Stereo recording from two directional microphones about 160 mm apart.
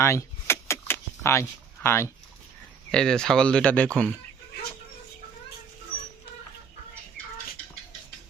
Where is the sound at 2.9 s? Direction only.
5° left (ahead or behind).